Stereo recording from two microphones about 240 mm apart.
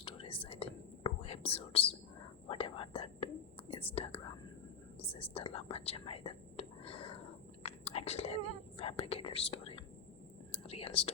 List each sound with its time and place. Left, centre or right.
0.0 s whispering: left